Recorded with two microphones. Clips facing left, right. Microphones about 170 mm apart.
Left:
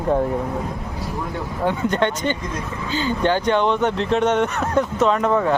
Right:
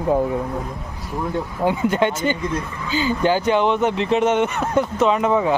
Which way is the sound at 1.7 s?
5° right (ahead or behind).